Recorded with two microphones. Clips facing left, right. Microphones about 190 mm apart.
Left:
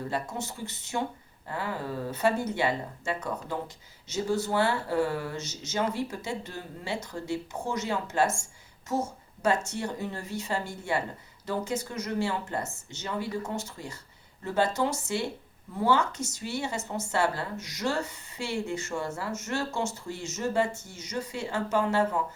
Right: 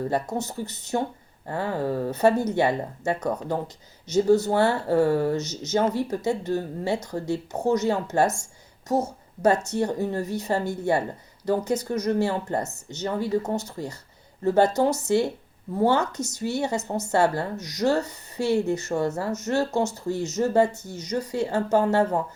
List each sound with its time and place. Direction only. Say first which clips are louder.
0.0 s a woman's voice: right 7 dB; 40° right (ahead or behind)